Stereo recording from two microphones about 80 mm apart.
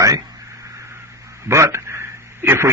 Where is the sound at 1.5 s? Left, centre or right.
Right.